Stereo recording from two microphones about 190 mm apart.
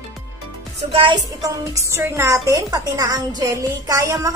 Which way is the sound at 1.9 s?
15° right (ahead or behind).